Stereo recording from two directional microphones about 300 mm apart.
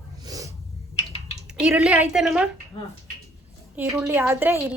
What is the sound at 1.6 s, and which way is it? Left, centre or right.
Speech, centre.